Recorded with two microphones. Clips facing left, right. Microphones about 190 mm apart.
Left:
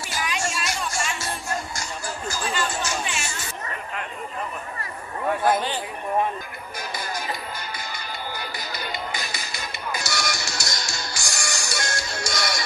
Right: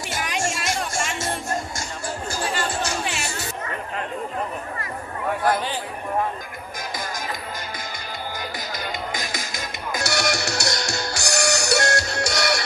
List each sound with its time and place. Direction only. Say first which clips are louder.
0.1 s music: right 2 dB; 50° right (ahead or behind)
1.3 s music: right 3 dB; 25° right (ahead or behind)
3.1 s chatter: right 2 dB; 60° right (ahead or behind)
8.5 s music: right 2 dB; 90° right; by 12.6 s 65° right (ahead or behind)